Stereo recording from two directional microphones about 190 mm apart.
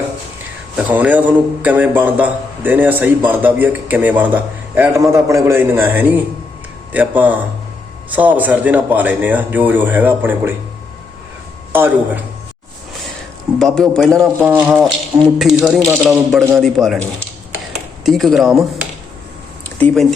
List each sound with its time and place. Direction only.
0.9 s a man's voice: 10° right (ahead or behind)
11.7 s a man's voice: 10° right (ahead or behind)
13.6 s a man's voice: centre (ahead or behind)